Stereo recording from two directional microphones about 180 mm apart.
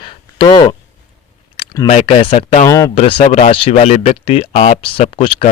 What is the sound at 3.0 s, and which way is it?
Speech, 30° left (ahead or behind).